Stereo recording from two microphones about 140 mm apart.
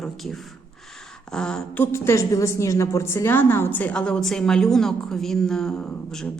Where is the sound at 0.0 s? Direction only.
Centre (ahead or behind).